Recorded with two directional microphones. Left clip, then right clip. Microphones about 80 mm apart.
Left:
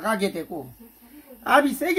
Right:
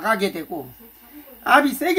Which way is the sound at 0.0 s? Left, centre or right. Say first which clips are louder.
Right 4 dB; centre.